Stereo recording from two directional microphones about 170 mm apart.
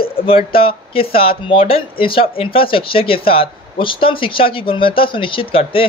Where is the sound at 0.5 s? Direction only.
30° left (ahead or behind).